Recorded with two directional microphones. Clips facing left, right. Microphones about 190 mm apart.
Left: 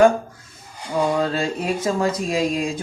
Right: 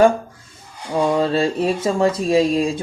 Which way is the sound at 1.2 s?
30° right (ahead or behind).